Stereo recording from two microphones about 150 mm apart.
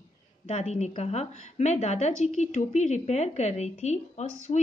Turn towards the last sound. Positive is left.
turn(degrees=35)  # may be behind; listen again after turning